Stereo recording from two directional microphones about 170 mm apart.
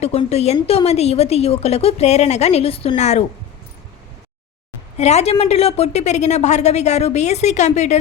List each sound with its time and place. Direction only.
0.0 s a woman's voice: 40° left (ahead or behind)
4.9 s a woman's voice: 40° left (ahead or behind)